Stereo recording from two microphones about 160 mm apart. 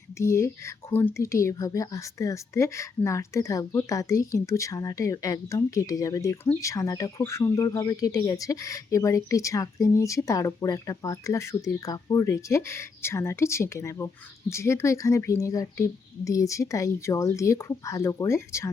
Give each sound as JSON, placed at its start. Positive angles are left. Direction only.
{"t": 0.2, "sound": "speech", "side_deg": 15}